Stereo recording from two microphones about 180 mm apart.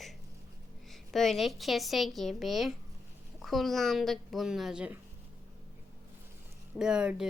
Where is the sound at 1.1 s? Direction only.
Centre (ahead or behind).